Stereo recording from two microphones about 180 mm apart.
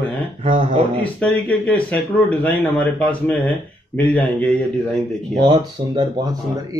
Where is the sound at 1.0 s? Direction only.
5° left (ahead or behind).